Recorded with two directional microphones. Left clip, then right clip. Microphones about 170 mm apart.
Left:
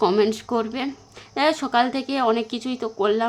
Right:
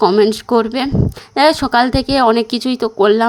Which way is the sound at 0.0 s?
25° right (ahead or behind).